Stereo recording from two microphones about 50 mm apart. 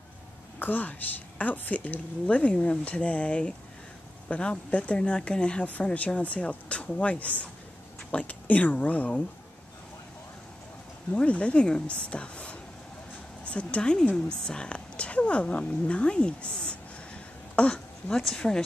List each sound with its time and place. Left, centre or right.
0.6 s a woman's voice: left
2.2 s a woman's voice: left
11.1 s speech: left
14.1 s speech: centre
17.6 s a sound: left
18.4 s a woman's voice: centre